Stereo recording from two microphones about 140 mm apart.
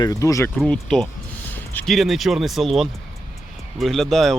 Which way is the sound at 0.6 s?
5° left (ahead or behind).